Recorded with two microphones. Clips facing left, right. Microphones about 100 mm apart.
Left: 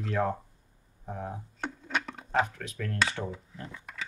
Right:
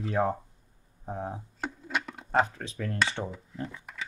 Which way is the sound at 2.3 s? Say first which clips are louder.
Right 2 dB; 35° right (ahead or behind).